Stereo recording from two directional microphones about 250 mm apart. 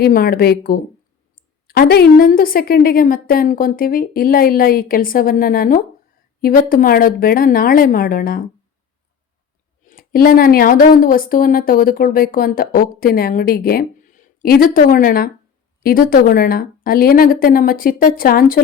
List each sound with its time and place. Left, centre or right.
0.0 s speech: left
9.8 s speech: left